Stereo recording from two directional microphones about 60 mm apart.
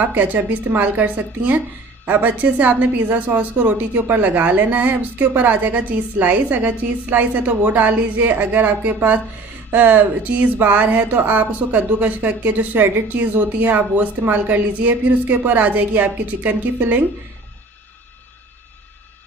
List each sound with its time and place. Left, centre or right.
0.0 s a woman's voice: right